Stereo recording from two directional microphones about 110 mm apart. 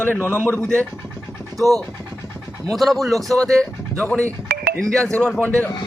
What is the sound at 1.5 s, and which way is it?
Speech, centre (ahead or behind).